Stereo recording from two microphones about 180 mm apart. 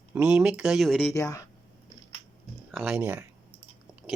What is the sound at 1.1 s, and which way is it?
Speech, 15° left (ahead or behind).